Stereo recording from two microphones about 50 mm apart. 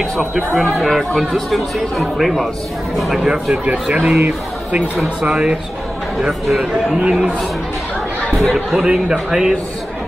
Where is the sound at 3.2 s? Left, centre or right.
Centre.